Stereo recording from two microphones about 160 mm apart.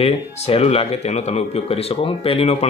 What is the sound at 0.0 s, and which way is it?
Speech, 40° left (ahead or behind).